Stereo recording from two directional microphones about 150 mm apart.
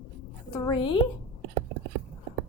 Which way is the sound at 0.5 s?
30° left (ahead or behind).